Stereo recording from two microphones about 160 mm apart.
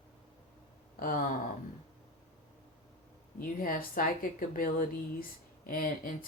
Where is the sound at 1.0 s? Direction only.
60° left (ahead or behind).